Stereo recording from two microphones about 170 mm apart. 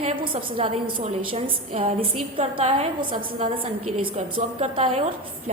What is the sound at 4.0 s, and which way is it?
A woman's voice, 35° right (ahead or behind).